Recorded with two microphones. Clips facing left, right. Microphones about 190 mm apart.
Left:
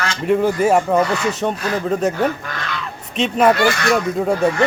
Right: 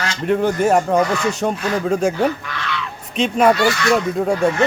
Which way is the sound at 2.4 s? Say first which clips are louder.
Right 1 dB; 45° left (ahead or behind).